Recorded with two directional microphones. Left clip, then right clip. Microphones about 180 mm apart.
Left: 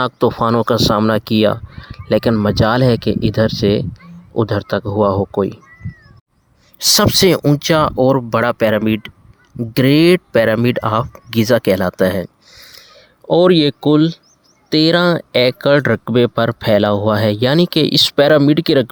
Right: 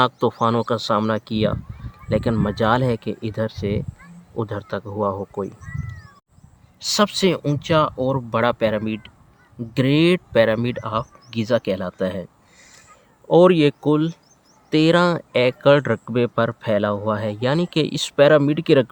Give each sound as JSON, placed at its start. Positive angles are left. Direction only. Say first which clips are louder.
{"t": 0.0, "sound": "speech", "louder": "left 3 dB", "side_deg": 35}
{"t": 6.7, "sound": "speech", "louder": "left 7 dB", "side_deg": 40}
{"t": 13.4, "sound": "speech", "louder": "left 4 dB", "side_deg": 25}